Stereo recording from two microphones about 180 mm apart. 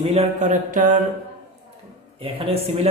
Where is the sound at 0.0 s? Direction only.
35° right (ahead or behind).